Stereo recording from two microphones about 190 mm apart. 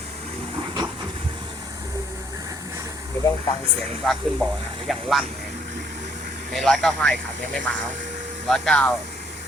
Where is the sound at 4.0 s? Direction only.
Centre (ahead or behind).